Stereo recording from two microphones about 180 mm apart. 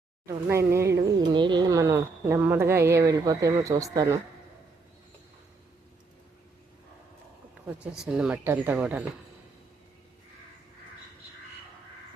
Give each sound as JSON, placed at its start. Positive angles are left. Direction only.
{"t": 0.3, "sound": "speech", "side_deg": -15}
{"t": 7.6, "sound": "a sound", "side_deg": -10}
{"t": 8.0, "sound": "speech", "side_deg": -5}